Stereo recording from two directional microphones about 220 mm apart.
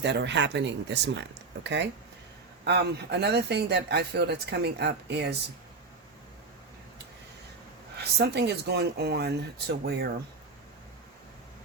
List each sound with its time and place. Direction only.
0.0 s speech: 50° right (ahead or behind)
7.9 s speech: 50° right (ahead or behind)